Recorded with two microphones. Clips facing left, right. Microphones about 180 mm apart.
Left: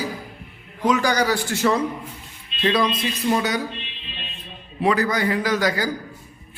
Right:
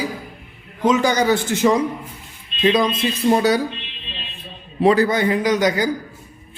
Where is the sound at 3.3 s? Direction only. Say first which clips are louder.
Right 6 dB; 35° right (ahead or behind).